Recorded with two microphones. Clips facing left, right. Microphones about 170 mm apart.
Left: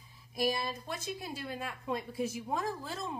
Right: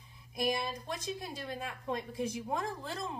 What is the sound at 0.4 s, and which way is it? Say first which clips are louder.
A woman's voice: left 1 dB; 5° left (ahead or behind).